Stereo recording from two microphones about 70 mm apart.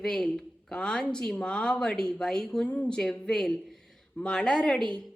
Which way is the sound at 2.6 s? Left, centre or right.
Left.